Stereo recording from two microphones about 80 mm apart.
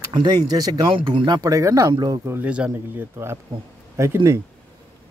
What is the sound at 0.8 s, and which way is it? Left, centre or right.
Speech, right.